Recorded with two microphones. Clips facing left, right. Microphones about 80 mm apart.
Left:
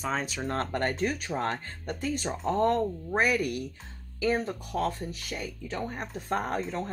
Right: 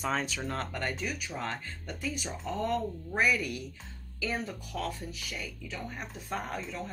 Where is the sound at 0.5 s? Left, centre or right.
Left.